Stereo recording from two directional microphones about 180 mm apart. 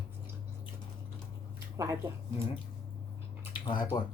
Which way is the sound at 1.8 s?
15° right (ahead or behind).